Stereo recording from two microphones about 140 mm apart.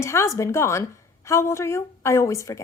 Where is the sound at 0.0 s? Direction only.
20° left (ahead or behind).